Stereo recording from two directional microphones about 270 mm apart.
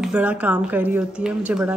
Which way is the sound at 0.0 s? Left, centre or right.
Centre.